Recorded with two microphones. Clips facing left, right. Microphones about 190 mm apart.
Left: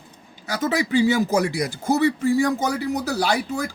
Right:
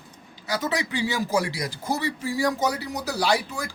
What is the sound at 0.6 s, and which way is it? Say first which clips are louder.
Speech: left 9 dB; 45° left (ahead or behind).